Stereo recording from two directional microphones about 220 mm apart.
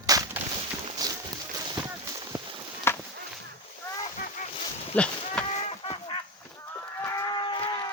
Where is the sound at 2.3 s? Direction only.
15° right (ahead or behind).